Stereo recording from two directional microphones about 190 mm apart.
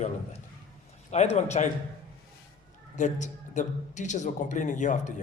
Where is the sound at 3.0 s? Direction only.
40° left (ahead or behind).